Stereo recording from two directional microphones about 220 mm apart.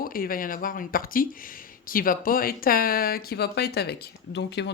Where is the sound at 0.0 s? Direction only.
40° left (ahead or behind).